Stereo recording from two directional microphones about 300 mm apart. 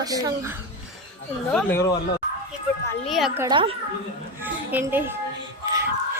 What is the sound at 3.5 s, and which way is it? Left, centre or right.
Speech, centre.